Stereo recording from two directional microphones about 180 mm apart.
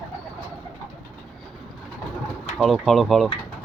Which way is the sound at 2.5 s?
5° right (ahead or behind).